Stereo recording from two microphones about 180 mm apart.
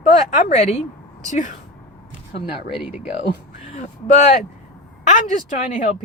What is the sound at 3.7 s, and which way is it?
Speech, 40° left (ahead or behind).